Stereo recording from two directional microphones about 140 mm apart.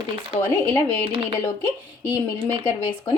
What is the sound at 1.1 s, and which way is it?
Speech, 40° right (ahead or behind).